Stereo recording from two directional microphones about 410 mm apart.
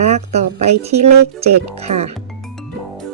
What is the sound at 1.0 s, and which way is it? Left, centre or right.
Speech, right.